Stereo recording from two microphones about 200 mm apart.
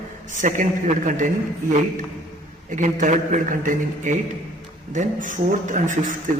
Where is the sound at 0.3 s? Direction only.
40° right (ahead or behind).